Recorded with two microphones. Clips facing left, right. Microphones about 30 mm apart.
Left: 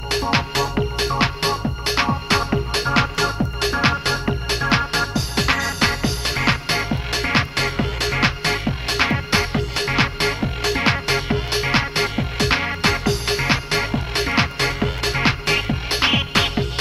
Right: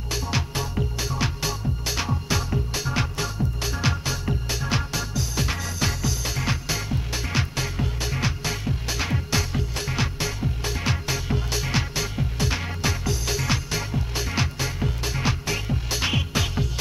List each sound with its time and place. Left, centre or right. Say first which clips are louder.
0.1 s music: left 8 dB; left
2.0 s music: left 8 dB; left
13.4 s music: left 7 dB; left
15.9 s music: left 7 dB; left